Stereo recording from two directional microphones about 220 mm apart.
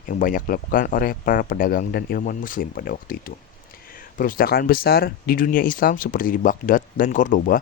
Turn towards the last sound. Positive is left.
turn(degrees=35)  # may be behind; listen again after turning